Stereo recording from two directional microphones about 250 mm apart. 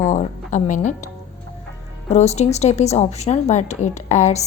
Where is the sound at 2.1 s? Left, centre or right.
Left.